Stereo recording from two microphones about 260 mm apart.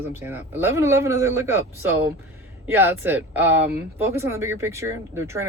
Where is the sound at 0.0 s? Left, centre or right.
Centre.